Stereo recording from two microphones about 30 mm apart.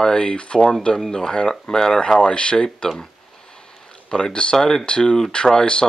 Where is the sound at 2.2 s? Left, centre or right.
Left.